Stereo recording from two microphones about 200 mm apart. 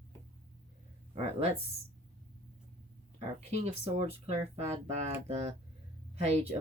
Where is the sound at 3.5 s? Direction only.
35° right (ahead or behind).